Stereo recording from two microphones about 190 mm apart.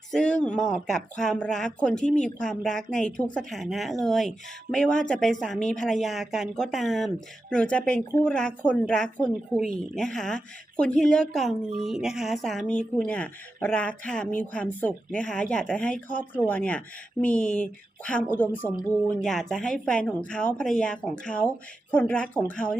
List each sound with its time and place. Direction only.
0.1 s a woman's voice: 5° left (ahead or behind)